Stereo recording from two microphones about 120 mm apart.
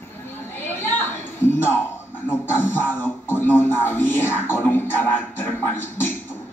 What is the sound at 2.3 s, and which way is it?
A man's voice, 20° left (ahead or behind).